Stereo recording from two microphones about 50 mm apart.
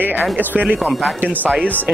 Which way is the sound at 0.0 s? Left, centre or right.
Right.